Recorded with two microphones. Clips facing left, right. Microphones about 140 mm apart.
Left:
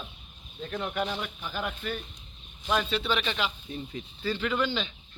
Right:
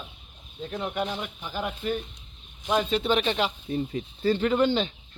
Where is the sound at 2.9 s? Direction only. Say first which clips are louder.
Right 5 dB; 45° right (ahead or behind).